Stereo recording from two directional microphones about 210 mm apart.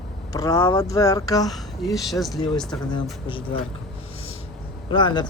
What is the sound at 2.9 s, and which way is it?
Speech, 25° left (ahead or behind).